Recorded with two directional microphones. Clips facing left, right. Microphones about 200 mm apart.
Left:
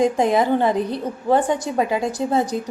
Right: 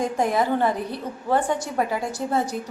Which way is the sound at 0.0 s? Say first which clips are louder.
Left 5 dB; 20° left (ahead or behind).